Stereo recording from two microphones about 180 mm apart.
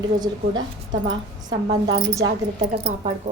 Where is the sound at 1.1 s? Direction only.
25° right (ahead or behind).